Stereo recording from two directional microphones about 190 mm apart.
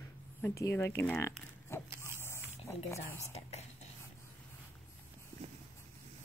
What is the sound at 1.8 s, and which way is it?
Dog, 10° right (ahead or behind).